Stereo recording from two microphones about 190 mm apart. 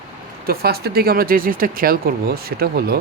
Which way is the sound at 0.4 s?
55° right (ahead or behind).